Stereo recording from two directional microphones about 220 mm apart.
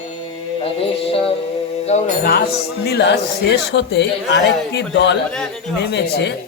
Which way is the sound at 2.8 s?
50° left (ahead or behind).